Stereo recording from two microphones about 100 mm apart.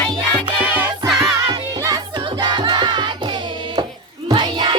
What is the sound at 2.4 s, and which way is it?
Music, 45° right (ahead or behind).